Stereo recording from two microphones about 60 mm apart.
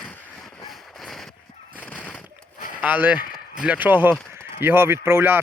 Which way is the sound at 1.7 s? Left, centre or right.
Left.